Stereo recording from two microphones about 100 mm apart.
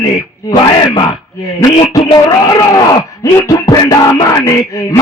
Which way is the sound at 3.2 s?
30° left (ahead or behind).